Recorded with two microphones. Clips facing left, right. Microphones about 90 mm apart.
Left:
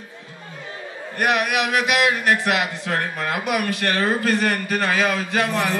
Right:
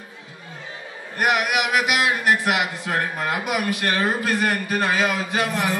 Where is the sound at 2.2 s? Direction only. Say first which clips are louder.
Even; 20° right (ahead or behind).